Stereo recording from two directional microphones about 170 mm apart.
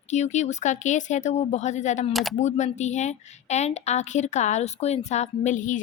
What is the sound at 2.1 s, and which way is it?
Speech, centre (ahead or behind).